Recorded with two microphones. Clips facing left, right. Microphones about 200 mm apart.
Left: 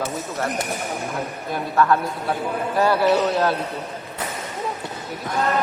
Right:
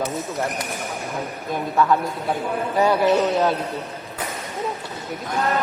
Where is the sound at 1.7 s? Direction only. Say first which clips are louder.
Left 1 dB; 10° right (ahead or behind).